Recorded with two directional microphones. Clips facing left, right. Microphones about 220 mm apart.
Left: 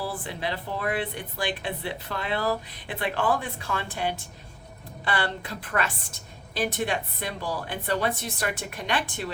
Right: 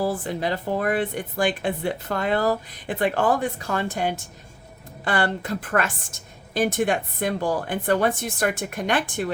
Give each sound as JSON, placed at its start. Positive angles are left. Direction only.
{"t": 0.0, "sound": "a woman's voice", "side_deg": -45}